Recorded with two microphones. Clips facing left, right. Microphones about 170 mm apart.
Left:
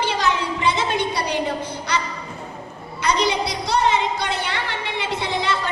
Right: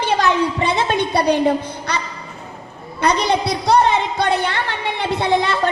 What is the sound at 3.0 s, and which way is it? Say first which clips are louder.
Speech: right 3 dB; 55° right (ahead or behind).